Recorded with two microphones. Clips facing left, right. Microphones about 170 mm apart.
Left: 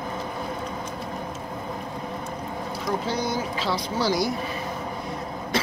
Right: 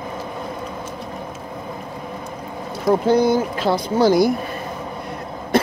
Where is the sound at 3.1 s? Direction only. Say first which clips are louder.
Right 11 dB; 55° right (ahead or behind).